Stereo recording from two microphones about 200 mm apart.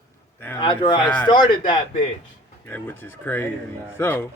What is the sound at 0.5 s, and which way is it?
Speech, 25° left (ahead or behind).